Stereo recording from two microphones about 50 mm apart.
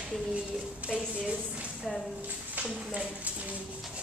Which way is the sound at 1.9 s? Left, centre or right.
Centre.